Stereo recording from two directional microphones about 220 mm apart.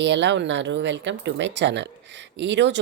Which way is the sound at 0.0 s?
55° right (ahead or behind).